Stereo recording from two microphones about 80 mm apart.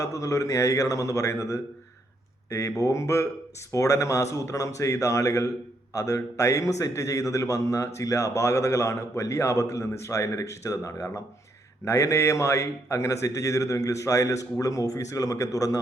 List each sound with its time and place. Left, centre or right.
0.0 s a man's voice: left